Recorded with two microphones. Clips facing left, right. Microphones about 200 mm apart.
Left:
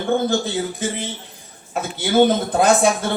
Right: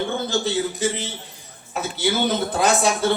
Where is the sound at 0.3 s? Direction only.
55° left (ahead or behind).